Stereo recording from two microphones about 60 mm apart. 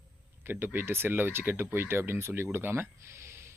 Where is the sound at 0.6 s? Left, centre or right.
Right.